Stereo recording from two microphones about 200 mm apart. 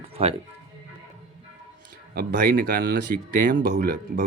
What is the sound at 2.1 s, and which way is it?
Speech, 45° right (ahead or behind).